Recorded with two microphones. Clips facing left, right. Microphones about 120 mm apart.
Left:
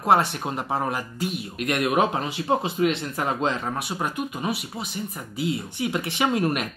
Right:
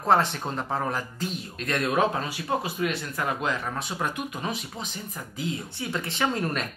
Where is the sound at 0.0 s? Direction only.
10° left (ahead or behind).